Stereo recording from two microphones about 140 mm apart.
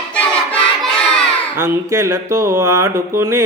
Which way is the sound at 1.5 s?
20° right (ahead or behind).